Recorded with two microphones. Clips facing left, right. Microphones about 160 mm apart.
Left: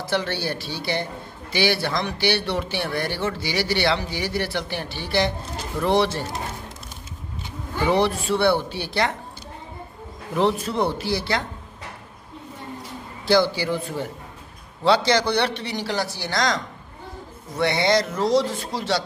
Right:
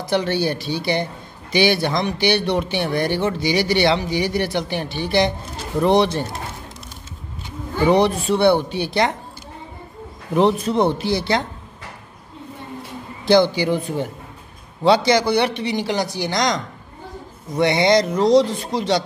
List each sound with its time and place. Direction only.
0.0 s a man's voice: 15° right (ahead or behind)
7.9 s speech: 20° right (ahead or behind)
10.3 s speech: 20° right (ahead or behind)
13.2 s a man's voice: 20° right (ahead or behind)